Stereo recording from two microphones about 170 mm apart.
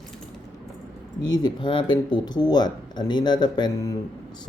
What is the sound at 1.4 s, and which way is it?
Speech, 30° left (ahead or behind).